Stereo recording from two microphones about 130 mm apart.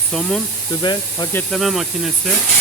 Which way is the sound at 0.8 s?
35° left (ahead or behind).